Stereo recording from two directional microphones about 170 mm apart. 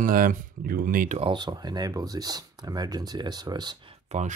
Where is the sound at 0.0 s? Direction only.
55° right (ahead or behind).